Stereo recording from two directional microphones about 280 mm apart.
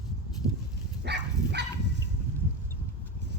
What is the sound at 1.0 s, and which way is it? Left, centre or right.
Dog, right.